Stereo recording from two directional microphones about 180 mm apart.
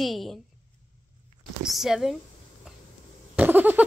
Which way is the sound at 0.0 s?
Centre (ahead or behind).